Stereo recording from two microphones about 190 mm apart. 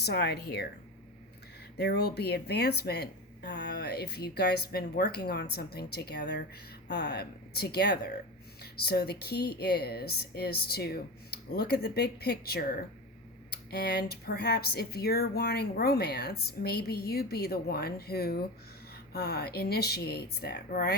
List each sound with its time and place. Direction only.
0.0 s speech: 60° left (ahead or behind)
1.8 s speech: 60° left (ahead or behind)